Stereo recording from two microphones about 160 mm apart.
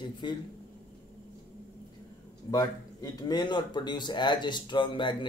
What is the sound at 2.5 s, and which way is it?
Speech, 20° left (ahead or behind).